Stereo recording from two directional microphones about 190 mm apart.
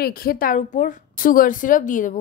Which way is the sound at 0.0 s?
50° left (ahead or behind).